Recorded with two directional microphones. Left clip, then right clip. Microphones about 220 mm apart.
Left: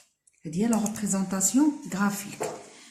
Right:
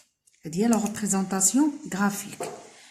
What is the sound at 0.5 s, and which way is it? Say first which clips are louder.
Speech: right 3 dB; 40° right (ahead or behind).